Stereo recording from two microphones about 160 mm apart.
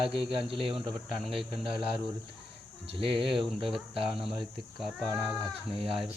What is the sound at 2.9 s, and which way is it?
Cricket, 35° right (ahead or behind).